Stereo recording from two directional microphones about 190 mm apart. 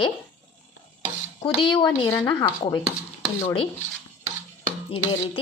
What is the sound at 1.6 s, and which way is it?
Speech, 25° left (ahead or behind).